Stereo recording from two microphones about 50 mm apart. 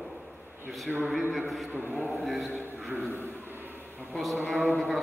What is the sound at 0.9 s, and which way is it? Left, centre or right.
A man's voice, centre.